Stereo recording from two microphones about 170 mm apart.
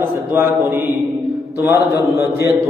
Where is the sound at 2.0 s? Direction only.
15° right (ahead or behind).